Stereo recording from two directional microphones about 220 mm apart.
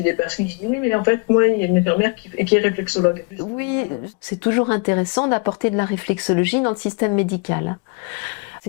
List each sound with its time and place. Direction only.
0.0 s speech: 15° left (ahead or behind)